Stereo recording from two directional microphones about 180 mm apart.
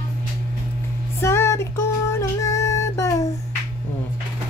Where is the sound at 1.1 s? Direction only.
15° left (ahead or behind).